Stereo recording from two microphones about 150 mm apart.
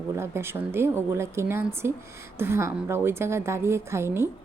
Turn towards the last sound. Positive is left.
turn(degrees=-15)  # may be behind; listen again after turning